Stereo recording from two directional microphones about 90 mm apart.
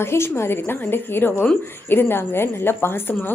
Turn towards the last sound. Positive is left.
turn(degrees=25)  # may be behind; listen again after turning